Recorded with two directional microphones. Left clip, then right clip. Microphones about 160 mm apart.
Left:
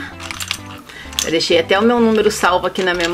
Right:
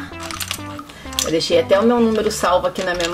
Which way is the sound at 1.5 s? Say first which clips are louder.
Left 1 dB; 25° left (ahead or behind).